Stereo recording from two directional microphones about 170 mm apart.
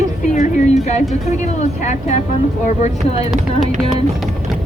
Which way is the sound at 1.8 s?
45° left (ahead or behind).